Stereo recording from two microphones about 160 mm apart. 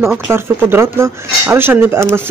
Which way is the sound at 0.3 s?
15° right (ahead or behind).